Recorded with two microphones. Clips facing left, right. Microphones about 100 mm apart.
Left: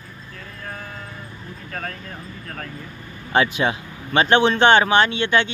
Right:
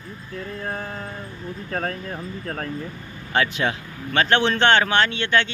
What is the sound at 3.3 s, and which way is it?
Speech, 15° left (ahead or behind).